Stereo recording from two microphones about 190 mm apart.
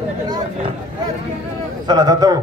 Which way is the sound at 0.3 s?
30° right (ahead or behind).